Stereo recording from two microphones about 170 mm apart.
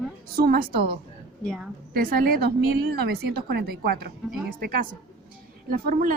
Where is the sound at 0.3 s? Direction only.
60° right (ahead or behind).